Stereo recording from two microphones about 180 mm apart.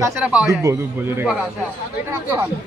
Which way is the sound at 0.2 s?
5° right (ahead or behind).